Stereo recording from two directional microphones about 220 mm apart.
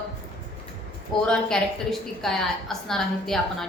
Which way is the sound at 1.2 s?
5° left (ahead or behind).